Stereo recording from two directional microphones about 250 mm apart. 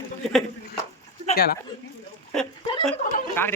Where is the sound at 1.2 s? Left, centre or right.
Left.